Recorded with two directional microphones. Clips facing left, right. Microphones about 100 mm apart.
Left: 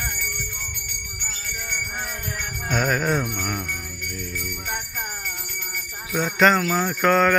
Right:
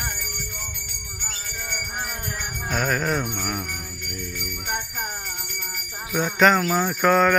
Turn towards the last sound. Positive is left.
turn(degrees=-5)  # may be behind; listen again after turning